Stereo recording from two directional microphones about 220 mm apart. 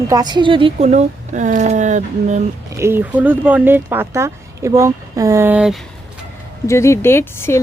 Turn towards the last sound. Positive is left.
turn(degrees=10)  # may be behind; listen again after turning